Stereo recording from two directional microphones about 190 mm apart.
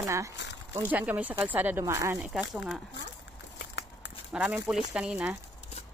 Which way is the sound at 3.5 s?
65° left (ahead or behind).